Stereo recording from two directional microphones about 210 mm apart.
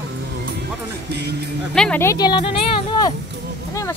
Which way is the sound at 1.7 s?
5° left (ahead or behind).